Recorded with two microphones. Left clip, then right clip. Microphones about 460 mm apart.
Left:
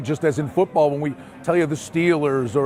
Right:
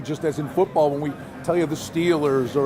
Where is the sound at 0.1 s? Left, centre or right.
Left.